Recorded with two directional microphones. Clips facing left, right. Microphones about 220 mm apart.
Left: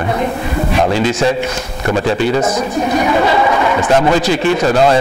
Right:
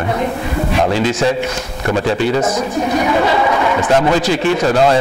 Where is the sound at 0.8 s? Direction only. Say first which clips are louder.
Left 1 dB; 15° left (ahead or behind).